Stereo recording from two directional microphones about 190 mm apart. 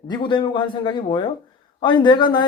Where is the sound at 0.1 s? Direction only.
25° left (ahead or behind).